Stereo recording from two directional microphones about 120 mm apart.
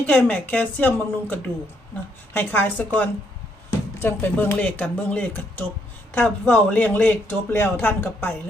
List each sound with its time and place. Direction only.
0.0 s speech: 15° left (ahead or behind)